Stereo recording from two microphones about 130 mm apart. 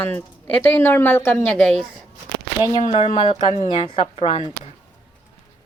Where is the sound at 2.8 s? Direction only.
55° left (ahead or behind).